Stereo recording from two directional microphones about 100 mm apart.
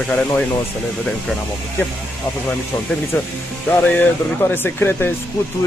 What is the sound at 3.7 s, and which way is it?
Speech, 15° left (ahead or behind).